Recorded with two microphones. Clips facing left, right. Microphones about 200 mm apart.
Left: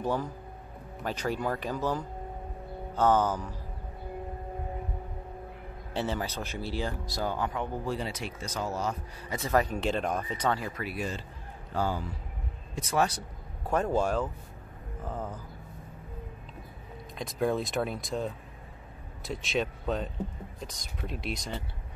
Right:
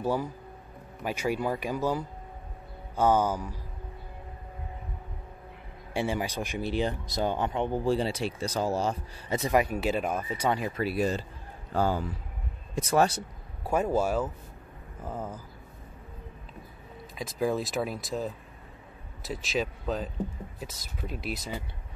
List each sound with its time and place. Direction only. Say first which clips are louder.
0.0 s speech: right 2 dB; 10° right (ahead or behind)
5.9 s speech: right 2 dB; 15° right (ahead or behind)
9.5 s speech: right 1 dB; 10° right (ahead or behind)
10.8 s a man's voice: right 7 dB; 35° right (ahead or behind)
13.7 s speech: right 1 dB; 10° right (ahead or behind)
17.1 s speech: even; centre (ahead or behind)